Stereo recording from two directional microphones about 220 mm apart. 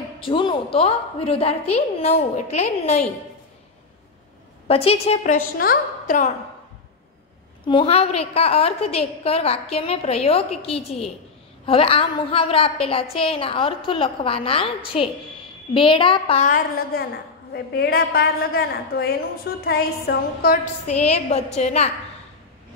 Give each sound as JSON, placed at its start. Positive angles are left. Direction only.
{"t": 0.2, "sound": "a woman's voice", "side_deg": 25}
{"t": 4.6, "sound": "a woman's voice", "side_deg": 25}
{"t": 7.6, "sound": "a woman's voice", "side_deg": 25}
{"t": 20.8, "sound": "a woman's voice", "side_deg": 30}